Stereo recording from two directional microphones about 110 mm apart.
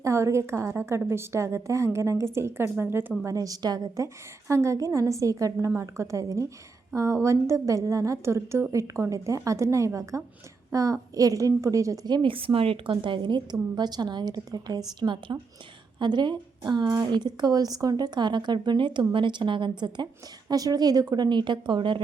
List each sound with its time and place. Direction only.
0.0 s a woman's voice: 25° right (ahead or behind)
3.2 s a woman's voice: 30° right (ahead or behind); by 22.0 s 50° right (ahead or behind)